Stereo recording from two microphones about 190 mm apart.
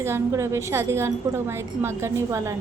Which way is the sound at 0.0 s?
15° right (ahead or behind).